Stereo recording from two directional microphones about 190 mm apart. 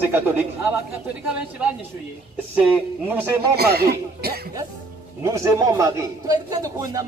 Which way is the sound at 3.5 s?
55° right (ahead or behind).